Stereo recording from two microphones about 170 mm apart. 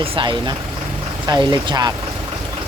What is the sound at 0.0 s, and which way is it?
Speech, 25° right (ahead or behind).